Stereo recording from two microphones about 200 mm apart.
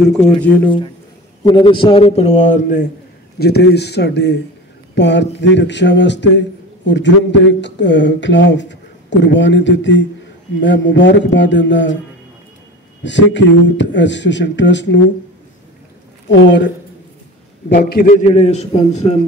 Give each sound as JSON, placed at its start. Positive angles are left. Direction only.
{"t": 0.7, "sound": "a man's voice", "side_deg": 25}
{"t": 3.3, "sound": "a man's voice", "side_deg": 55}
{"t": 13.0, "sound": "a man's voice", "side_deg": 65}
{"t": 16.3, "sound": "a man's voice", "side_deg": 65}
{"t": 17.6, "sound": "a man's voice", "side_deg": 50}
{"t": 18.2, "sound": "a man's voice", "side_deg": 30}